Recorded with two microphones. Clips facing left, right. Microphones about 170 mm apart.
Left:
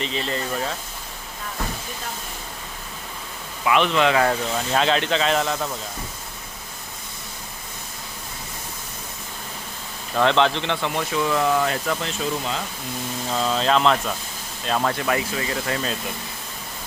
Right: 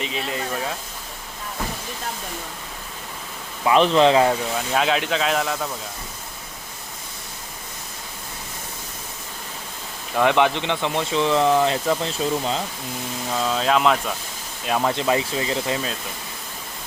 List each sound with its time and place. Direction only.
0.0 s speech: 5° right (ahead or behind)
3.6 s a man's voice: 35° right (ahead or behind)
4.2 s speech: 10° right (ahead or behind)
10.2 s speech: 10° right (ahead or behind); by 12.5 s 30° right (ahead or behind)
13.3 s speech: 5° right (ahead or behind)
14.7 s speech: 15° right (ahead or behind)